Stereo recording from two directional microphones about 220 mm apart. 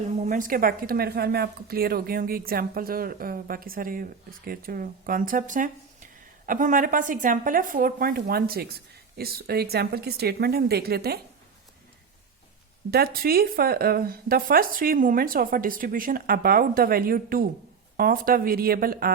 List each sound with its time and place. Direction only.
0.2 s a woman's voice: 35° right (ahead or behind)
12.9 s a woman's voice: 45° right (ahead or behind)